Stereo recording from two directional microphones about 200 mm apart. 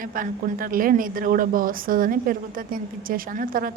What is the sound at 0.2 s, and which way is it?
A woman's voice, 45° right (ahead or behind).